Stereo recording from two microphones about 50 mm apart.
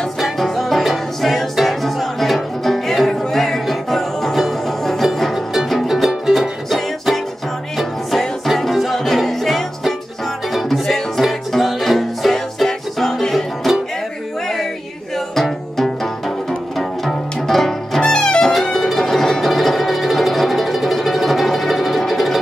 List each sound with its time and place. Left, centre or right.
0.2 s music: centre
7.7 s music: centre
15.3 s music: centre
18.0 s music: centre
18.5 s music: centre